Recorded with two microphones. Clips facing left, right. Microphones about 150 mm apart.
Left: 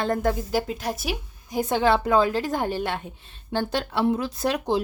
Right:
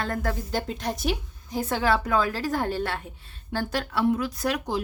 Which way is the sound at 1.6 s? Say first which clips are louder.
Left 3 dB; 20° left (ahead or behind).